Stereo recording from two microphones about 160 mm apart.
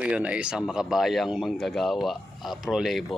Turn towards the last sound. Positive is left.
turn(degrees=0)  # may be behind; listen again after turning